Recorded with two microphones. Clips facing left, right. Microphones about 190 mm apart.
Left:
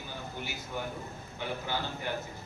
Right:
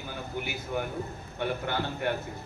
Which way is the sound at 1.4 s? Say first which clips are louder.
Right 5 dB; 60° right (ahead or behind).